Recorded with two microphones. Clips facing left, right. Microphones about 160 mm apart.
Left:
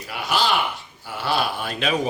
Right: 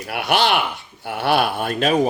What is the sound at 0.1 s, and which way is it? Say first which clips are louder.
Speech: right 4 dB; 65° right (ahead or behind).